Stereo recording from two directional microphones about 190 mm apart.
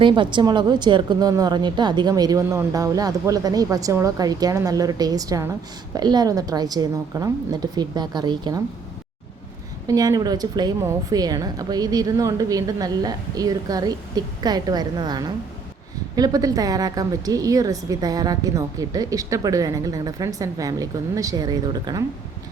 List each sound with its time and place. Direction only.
0.0 s a woman's voice: 25° right (ahead or behind)
9.8 s a woman's voice: 20° right (ahead or behind)